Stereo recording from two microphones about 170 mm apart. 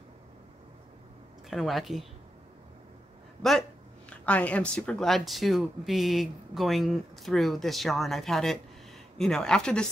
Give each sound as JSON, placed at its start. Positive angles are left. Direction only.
{"t": 1.5, "sound": "speech", "side_deg": 0}
{"t": 4.3, "sound": "speech", "side_deg": 10}